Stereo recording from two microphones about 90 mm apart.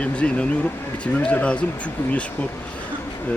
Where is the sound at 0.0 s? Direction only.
15° left (ahead or behind).